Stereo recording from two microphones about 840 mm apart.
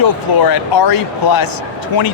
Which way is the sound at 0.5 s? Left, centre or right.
Left.